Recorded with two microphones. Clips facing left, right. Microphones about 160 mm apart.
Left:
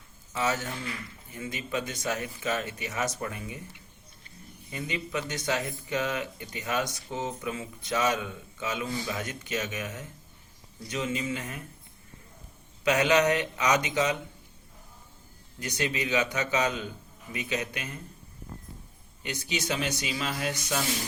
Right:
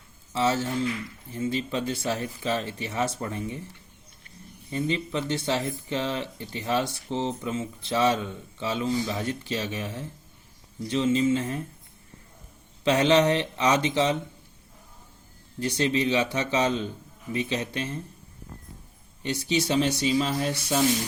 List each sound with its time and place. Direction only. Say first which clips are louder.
0.3 s speech: right 5 dB; 30° right (ahead or behind)
4.7 s speech: right 5 dB; 30° right (ahead or behind)
12.8 s speech: right 3 dB; 30° right (ahead or behind)
15.6 s speech: right 6 dB; 30° right (ahead or behind)
19.2 s speech: right 7 dB; 35° right (ahead or behind)